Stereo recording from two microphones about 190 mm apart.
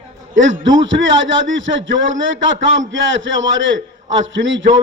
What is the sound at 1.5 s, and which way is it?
A man's voice, 80° right.